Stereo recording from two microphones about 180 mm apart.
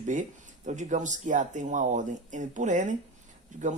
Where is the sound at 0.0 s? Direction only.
45° right (ahead or behind).